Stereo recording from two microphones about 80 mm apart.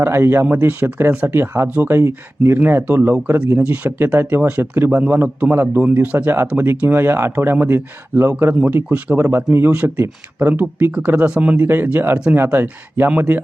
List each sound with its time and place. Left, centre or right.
0.0 s speech: right